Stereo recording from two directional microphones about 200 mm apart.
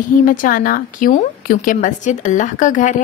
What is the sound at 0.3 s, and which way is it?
A woman's voice, 40° left (ahead or behind).